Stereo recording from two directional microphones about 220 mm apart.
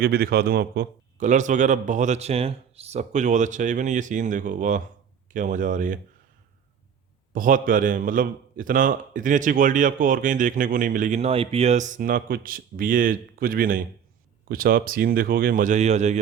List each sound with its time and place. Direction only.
0.0 s a man's voice: 45° right (ahead or behind)
7.3 s a man's voice: 40° right (ahead or behind)